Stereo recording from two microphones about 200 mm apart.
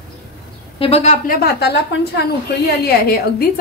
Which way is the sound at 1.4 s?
55° left (ahead or behind).